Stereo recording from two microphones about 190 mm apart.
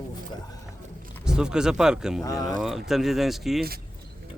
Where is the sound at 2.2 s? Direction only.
15° left (ahead or behind).